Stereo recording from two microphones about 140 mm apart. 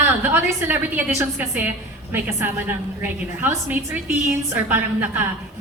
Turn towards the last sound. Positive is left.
turn(degrees=-15)  # may be behind; listen again after turning